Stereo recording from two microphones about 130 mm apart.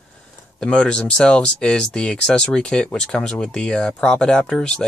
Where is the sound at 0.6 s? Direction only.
10° left (ahead or behind).